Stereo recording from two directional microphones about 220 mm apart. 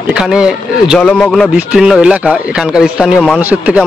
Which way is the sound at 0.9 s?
5° left (ahead or behind).